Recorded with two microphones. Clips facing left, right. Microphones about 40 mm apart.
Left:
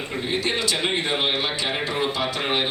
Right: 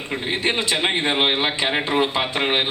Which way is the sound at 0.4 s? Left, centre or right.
Right.